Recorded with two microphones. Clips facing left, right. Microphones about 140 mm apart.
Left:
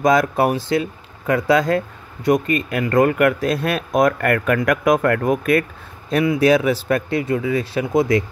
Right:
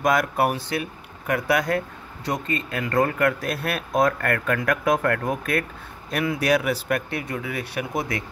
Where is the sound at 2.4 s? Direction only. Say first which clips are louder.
Left 7 dB; 70° left (ahead or behind).